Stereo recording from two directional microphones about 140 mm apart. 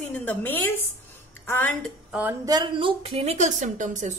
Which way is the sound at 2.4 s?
30° right (ahead or behind).